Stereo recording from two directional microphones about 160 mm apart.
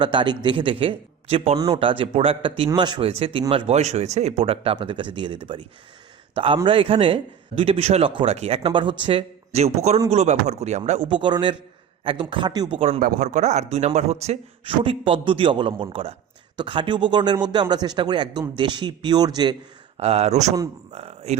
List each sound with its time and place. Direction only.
0.0 s a man's voice: 30° right (ahead or behind); by 11.1 s 45° right (ahead or behind)
11.1 s a man's voice: 30° right (ahead or behind)
12.8 s a man's voice: 45° right (ahead or behind); by 19.5 s 25° right (ahead or behind)
20.0 s a man's voice: 40° right (ahead or behind)